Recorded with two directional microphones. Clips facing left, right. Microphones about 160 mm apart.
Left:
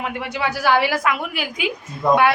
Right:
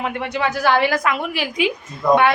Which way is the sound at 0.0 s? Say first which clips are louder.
Right 2 dB; 5° left (ahead or behind).